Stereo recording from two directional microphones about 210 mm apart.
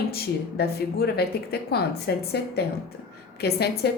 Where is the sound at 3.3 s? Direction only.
50° left (ahead or behind).